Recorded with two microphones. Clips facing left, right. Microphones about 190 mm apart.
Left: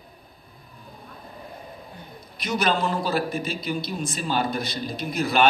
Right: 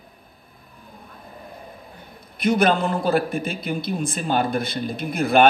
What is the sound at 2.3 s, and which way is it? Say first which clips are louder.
A man's voice: right 6 dB; 55° right (ahead or behind).